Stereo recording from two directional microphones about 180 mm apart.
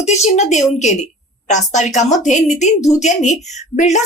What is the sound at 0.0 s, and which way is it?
A woman's voice, 40° left (ahead or behind).